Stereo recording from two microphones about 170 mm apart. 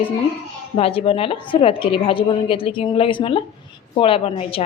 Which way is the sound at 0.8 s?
35° left (ahead or behind).